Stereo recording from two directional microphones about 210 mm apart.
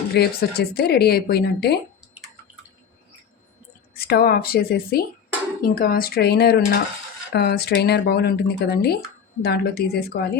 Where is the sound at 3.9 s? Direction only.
45° left (ahead or behind).